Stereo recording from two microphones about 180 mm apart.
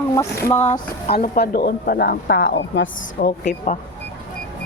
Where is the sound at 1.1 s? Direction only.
55° left (ahead or behind).